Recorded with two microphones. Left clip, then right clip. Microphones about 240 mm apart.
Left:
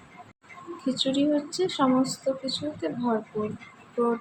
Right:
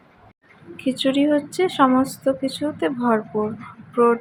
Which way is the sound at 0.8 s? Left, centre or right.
Right.